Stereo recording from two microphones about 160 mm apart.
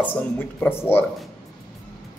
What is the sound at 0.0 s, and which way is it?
Speech, 10° left (ahead or behind).